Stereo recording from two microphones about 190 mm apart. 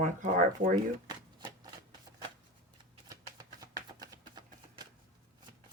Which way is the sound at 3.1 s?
20° right (ahead or behind).